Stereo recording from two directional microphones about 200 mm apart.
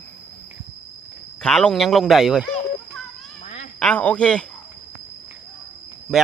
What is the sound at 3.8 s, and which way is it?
Speech, 5° left (ahead or behind).